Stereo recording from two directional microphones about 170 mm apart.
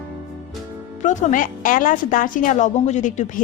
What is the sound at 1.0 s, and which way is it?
A woman's voice, 45° left (ahead or behind).